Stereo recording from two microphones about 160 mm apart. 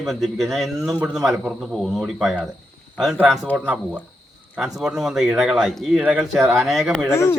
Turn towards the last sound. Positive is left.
turn(degrees=15)  # may be behind; listen again after turning